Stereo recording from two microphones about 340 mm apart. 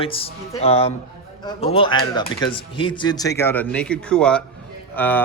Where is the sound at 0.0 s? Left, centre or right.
Centre.